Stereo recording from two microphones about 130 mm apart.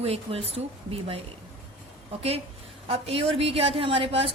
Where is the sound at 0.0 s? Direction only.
50° right (ahead or behind).